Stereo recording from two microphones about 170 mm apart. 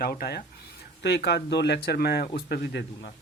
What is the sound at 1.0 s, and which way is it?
Speech, 85° left.